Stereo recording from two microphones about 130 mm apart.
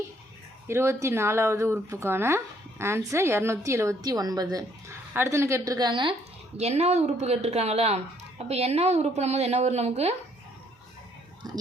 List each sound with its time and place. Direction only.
0.7 s speech: 20° right (ahead or behind); by 6.1 s 40° right (ahead or behind)
6.6 s a woman's voice: 55° right (ahead or behind)
11.4 s whispering: 30° right (ahead or behind)